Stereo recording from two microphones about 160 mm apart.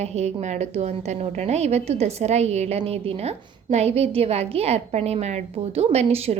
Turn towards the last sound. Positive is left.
turn(degrees=-40)  # may be behind; listen again after turning